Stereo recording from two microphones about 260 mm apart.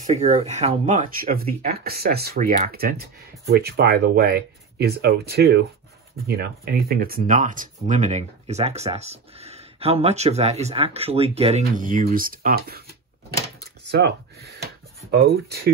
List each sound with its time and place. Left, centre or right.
0.0 s speech: right
13.8 s speech: right